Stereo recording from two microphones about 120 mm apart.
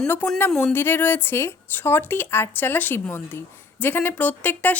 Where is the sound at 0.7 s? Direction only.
20° left (ahead or behind).